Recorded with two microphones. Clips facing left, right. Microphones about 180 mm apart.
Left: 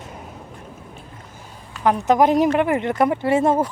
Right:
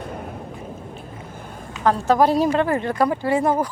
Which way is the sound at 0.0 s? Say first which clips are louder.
Right 6 dB; 55° right (ahead or behind).